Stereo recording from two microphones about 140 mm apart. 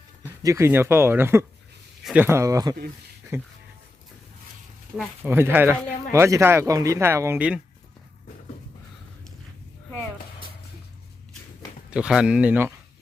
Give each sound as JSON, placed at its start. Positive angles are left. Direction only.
{"t": 0.4, "sound": "speech", "side_deg": -20}
{"t": 5.2, "sound": "speech", "side_deg": -15}
{"t": 11.9, "sound": "speech", "side_deg": -5}